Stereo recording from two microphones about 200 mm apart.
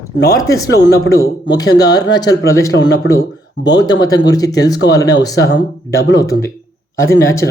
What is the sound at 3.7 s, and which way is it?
Speech, 20° left (ahead or behind).